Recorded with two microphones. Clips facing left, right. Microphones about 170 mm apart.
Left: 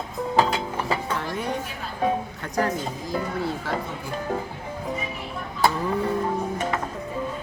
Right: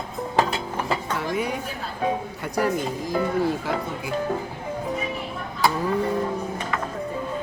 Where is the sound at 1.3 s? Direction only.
10° right (ahead or behind).